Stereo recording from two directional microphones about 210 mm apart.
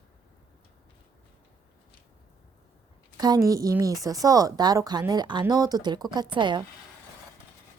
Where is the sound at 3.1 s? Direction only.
20° right (ahead or behind).